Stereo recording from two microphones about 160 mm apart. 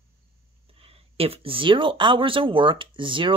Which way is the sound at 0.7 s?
35° right (ahead or behind).